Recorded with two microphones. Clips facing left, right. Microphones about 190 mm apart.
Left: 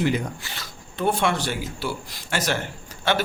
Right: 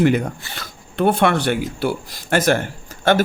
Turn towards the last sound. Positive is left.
turn(degrees=-50)  # may be behind; listen again after turning